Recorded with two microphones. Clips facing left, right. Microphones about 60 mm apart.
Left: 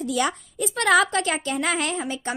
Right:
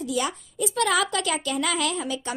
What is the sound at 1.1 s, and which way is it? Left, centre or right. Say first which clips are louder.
A woman's voice: left 2 dB; left.